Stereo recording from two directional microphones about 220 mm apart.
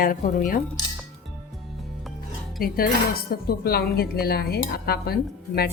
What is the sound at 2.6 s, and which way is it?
Speech, 45° left (ahead or behind).